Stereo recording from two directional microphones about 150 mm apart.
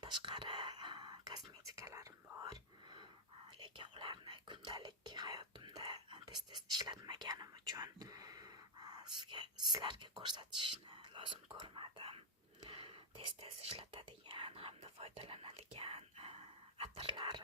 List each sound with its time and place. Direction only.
0.0 s whispering: 30° right (ahead or behind)
3.6 s speech: 35° right (ahead or behind)